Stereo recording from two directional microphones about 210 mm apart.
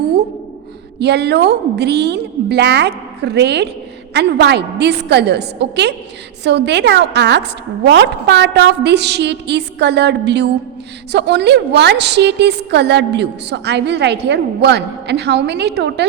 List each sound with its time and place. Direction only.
0.9 s a woman's voice: 50° right (ahead or behind)